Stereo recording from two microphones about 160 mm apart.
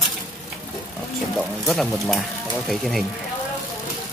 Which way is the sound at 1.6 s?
Centre (ahead or behind).